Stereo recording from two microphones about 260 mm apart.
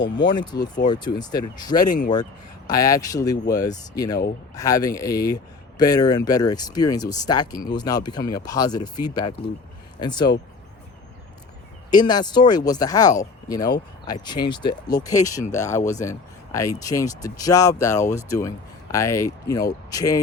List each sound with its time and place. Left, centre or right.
0.3 s speech: centre
1.9 s speech: left
2.6 s speech: centre
11.9 s speech: centre